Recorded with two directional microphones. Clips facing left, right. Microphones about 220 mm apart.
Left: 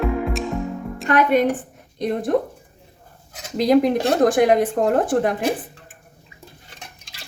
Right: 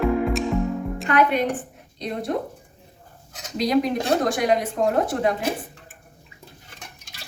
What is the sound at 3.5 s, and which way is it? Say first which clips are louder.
Speech: left 5 dB; 55° left (ahead or behind).